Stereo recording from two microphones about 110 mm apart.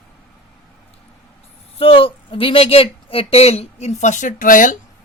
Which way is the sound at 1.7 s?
55° left (ahead or behind).